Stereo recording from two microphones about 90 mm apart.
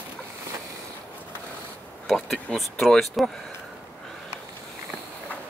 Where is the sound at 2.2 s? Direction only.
Centre (ahead or behind).